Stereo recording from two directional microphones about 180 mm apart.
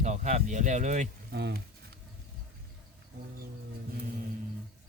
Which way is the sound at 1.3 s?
65° right (ahead or behind).